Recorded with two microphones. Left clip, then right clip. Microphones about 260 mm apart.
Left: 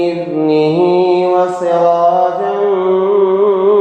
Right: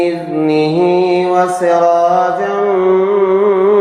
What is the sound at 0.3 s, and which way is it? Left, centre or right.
Mantra, right.